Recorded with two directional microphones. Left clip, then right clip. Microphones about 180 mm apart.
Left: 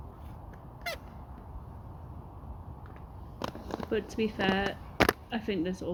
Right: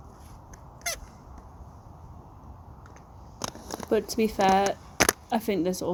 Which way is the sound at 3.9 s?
30° right (ahead or behind).